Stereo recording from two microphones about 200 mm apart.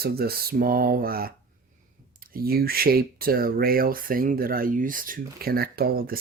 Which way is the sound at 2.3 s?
50° right (ahead or behind).